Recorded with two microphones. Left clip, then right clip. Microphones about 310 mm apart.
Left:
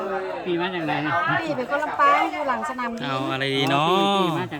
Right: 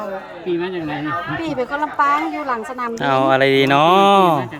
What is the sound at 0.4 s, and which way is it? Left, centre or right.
Speech, centre.